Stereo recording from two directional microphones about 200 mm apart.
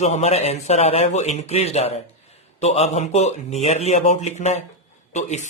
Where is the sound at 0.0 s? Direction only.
35° left (ahead or behind).